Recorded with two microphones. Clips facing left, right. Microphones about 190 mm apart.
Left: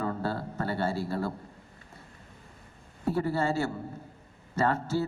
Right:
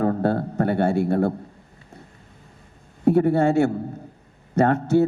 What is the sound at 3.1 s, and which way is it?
Speech, 65° right (ahead or behind).